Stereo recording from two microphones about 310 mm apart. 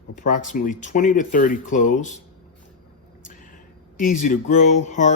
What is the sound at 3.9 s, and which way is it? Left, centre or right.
Speech, left.